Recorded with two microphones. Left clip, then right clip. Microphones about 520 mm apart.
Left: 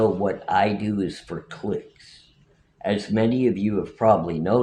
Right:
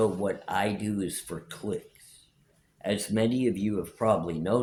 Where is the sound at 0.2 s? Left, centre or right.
Right.